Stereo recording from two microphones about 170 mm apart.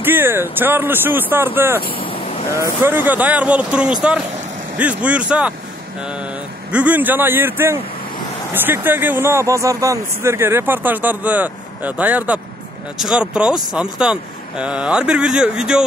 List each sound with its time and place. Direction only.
0.0 s speech: 10° right (ahead or behind)
1.9 s vehicle: 30° left (ahead or behind)
2.6 s speech: 15° right (ahead or behind)
6.7 s speech: 10° right (ahead or behind)